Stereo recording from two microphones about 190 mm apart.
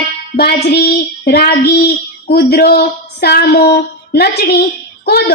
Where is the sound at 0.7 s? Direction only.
55° left (ahead or behind).